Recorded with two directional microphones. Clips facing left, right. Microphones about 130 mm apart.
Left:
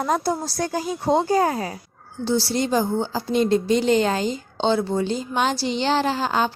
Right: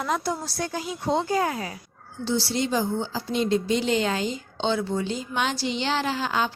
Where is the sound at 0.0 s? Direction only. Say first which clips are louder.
Left 5 dB; 40° left (ahead or behind).